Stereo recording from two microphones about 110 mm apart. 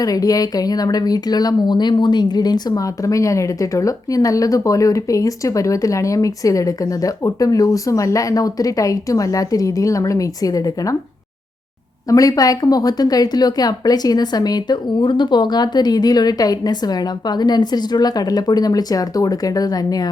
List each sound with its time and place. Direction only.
0.0 s speech: 35° left (ahead or behind)
12.0 s speech: 30° left (ahead or behind)